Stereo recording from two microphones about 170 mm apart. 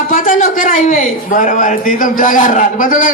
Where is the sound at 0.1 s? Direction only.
50° left (ahead or behind).